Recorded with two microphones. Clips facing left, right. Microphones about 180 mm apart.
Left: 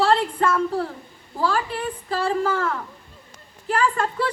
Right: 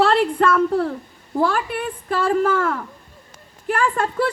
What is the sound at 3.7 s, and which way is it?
Speech, 50° right (ahead or behind).